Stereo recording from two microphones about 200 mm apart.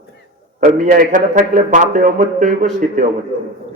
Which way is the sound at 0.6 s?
40° right (ahead or behind).